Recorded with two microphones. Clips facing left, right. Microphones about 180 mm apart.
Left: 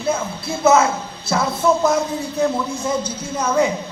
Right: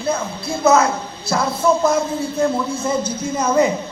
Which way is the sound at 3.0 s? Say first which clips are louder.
Right 4 dB; 10° left (ahead or behind).